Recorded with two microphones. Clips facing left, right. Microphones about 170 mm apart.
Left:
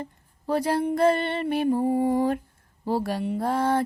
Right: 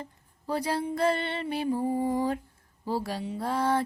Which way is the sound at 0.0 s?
55° left (ahead or behind).